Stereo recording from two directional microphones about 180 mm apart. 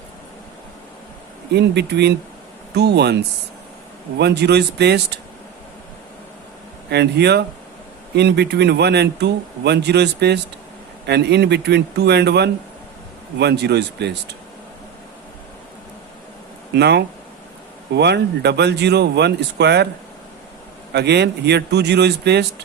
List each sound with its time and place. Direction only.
1.5 s speech: 70° right (ahead or behind)
4.2 s speech: 70° right (ahead or behind)
6.9 s speech: 65° right (ahead or behind)
16.7 s speech: 70° right (ahead or behind)
20.9 s speech: 70° right (ahead or behind)